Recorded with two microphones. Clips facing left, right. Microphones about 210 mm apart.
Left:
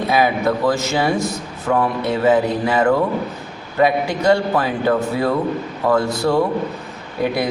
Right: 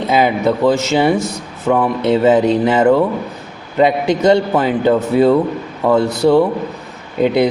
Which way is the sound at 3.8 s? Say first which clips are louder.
Right 4 dB; 20° right (ahead or behind).